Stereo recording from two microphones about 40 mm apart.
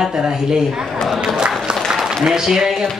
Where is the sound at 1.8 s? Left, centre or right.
Centre.